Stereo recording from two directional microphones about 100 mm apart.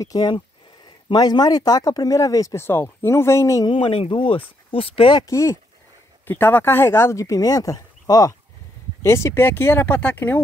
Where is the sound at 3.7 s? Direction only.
65° left (ahead or behind).